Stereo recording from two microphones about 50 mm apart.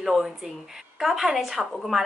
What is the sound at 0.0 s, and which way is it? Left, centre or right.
A woman's voice, centre.